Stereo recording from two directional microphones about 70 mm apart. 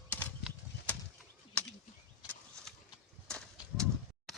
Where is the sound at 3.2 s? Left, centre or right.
Centre.